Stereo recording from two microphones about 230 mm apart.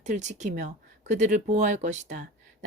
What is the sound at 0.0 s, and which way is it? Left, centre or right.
Speech, right.